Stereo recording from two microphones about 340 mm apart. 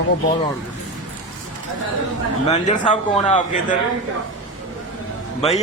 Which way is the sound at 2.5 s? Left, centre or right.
Centre.